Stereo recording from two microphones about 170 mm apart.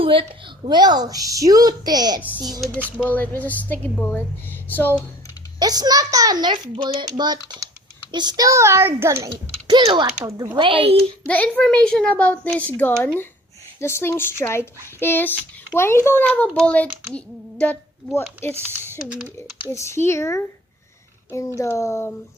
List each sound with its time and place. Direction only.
0.0 s a woman's voice: 30° right (ahead or behind)
2.7 s speech: 10° right (ahead or behind)
3.1 s speech: 10° left (ahead or behind)
5.5 s a woman's voice: 25° right (ahead or behind)
9.6 s a woman's voice: 30° right (ahead or behind)
10.2 s speech: 15° right (ahead or behind)
10.6 s speech: 30° right (ahead or behind)
11.3 s speech: 10° left (ahead or behind)
18.5 s speech: 10° right (ahead or behind)
19.7 s speech: 15° left (ahead or behind)